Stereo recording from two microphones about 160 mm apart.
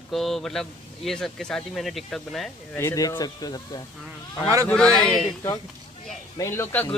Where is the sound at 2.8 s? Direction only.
20° left (ahead or behind).